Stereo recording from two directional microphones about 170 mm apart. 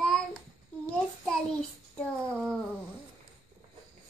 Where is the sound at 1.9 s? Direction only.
5° left (ahead or behind).